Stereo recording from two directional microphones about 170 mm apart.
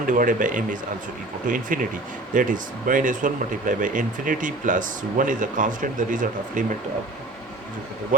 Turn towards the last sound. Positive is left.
turn(degrees=-50)  # may be behind; listen again after turning